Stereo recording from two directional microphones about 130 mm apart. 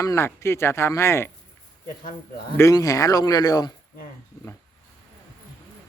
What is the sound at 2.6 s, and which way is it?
A man's voice, 25° left (ahead or behind).